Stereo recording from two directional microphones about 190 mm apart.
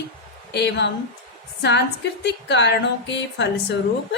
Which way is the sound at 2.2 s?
65° left (ahead or behind).